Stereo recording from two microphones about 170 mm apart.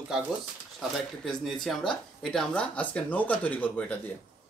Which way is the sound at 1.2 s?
Centre (ahead or behind).